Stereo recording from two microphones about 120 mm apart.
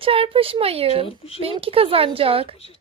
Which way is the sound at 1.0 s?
55° left (ahead or behind).